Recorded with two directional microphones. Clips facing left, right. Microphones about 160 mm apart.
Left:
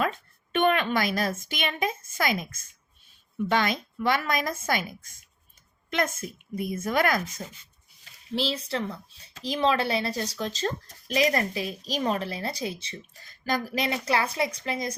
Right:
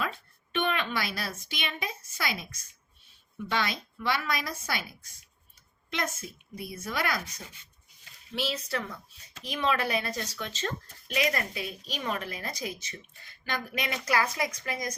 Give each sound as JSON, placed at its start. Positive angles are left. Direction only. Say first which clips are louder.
{"t": 0.0, "sound": "a sound", "louder": "left 6 dB", "side_deg": 50}
{"t": 3.5, "sound": "a woman's voice", "louder": "left 5 dB", "side_deg": 50}
{"t": 8.3, "sound": "a woman's voice", "louder": "left 4 dB", "side_deg": 30}